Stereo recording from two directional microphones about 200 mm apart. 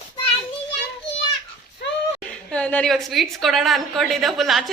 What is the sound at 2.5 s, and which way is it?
A woman's voice, 5° left (ahead or behind).